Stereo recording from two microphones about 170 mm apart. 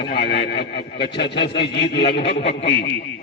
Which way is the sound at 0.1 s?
70° left (ahead or behind).